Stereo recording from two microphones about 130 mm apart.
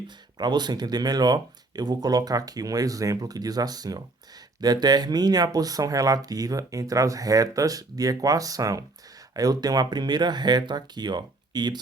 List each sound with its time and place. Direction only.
0.3 s speech: 35° right (ahead or behind)